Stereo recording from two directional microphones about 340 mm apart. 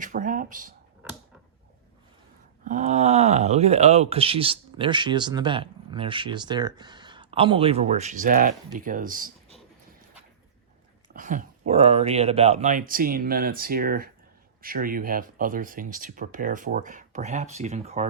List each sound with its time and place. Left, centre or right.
0.0 s a sound: right
2.6 s speech: centre
11.1 s speech: right